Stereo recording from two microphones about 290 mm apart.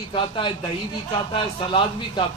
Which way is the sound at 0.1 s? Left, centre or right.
Centre.